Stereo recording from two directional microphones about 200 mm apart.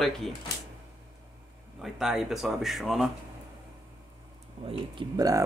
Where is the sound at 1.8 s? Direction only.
Centre (ahead or behind).